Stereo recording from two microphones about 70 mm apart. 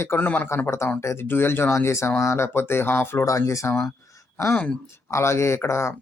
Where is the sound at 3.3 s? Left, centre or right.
Left.